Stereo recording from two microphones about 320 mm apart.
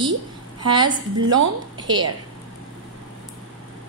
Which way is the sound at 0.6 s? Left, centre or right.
Centre.